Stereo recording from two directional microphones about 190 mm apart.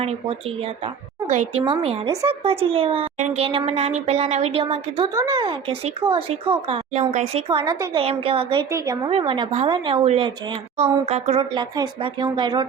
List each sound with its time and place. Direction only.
0.0 s a woman's voice: 30° right (ahead or behind)
7.4 s a woman's voice: 20° right (ahead or behind)
8.7 s a woman's voice: 20° right (ahead or behind)
9.0 s a woman's voice: 30° right (ahead or behind)